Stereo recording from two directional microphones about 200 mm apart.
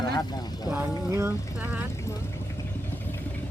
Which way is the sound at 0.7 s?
10° right (ahead or behind).